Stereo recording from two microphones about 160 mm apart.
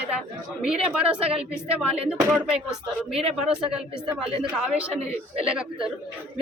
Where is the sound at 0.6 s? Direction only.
5° right (ahead or behind).